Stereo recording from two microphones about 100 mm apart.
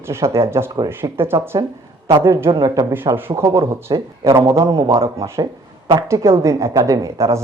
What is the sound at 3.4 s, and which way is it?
A woman's voice, 35° right (ahead or behind).